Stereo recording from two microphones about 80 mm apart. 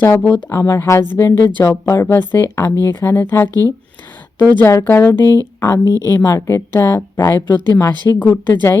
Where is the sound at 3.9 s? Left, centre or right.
Left.